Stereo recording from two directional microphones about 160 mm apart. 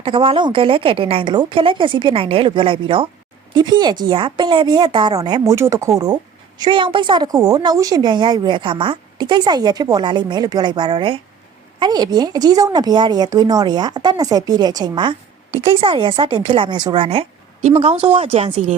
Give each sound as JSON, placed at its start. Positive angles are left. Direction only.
{"t": 0.0, "sound": "a woman's voice", "side_deg": -35}